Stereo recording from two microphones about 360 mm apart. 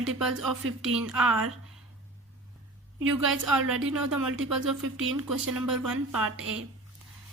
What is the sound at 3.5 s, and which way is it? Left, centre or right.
Speech, right.